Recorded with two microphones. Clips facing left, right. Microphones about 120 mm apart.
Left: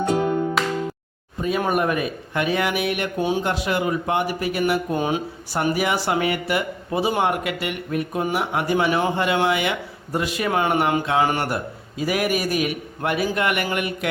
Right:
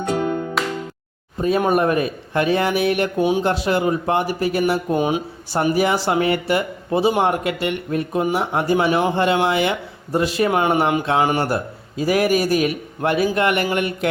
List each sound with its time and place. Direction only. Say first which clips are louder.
0.0 s music: left 1 dB; centre (ahead or behind)
1.4 s a man's voice: right 4 dB; 35° right (ahead or behind)
3.2 s speech: right 2 dB; 15° right (ahead or behind)
3.4 s a man's voice: right 4 dB; 30° right (ahead or behind)
4.9 s speech: right 3 dB; 15° right (ahead or behind)
5.5 s speech: right 4 dB; 30° right (ahead or behind)
11.4 s a man's voice: right 4 dB; 30° right (ahead or behind)